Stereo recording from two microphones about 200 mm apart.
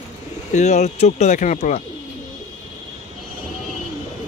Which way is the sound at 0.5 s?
35° left (ahead or behind).